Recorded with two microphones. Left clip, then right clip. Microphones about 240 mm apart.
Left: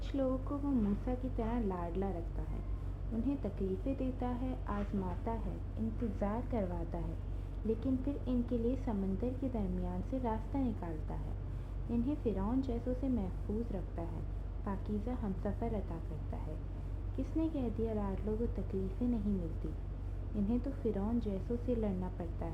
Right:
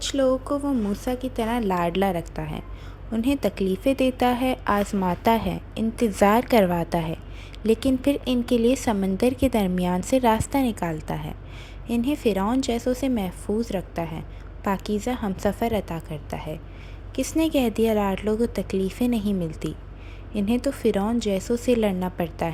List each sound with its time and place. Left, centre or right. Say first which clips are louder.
0.0 s a sound: right 14 dB; right
1.0 s speech: right 13 dB; right
3.2 s speech: right 15 dB; right